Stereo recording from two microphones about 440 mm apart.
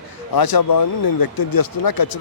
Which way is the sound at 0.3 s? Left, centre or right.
Left.